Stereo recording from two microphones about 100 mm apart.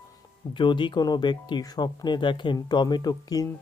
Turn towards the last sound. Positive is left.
turn(degrees=40)  # may be behind; listen again after turning